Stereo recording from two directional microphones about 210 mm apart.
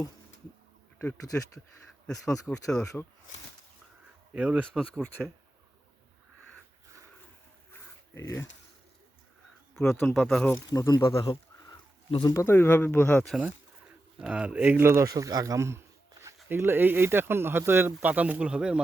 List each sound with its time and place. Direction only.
0.9 s speech: 15° left (ahead or behind)
4.4 s speech: 5° right (ahead or behind)
7.7 s a sound: 15° left (ahead or behind)
9.9 s speech: 5° left (ahead or behind)
10.7 s speech: 20° left (ahead or behind)
14.2 s speech: 5° right (ahead or behind)